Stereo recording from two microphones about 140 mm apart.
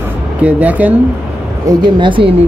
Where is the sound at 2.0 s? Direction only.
35° right (ahead or behind).